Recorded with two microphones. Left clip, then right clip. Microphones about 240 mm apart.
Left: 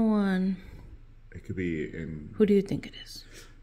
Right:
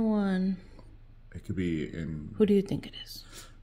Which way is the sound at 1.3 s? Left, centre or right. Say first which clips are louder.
Even; right.